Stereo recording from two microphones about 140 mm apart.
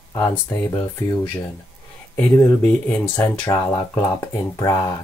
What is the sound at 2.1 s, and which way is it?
Speech, 15° left (ahead or behind).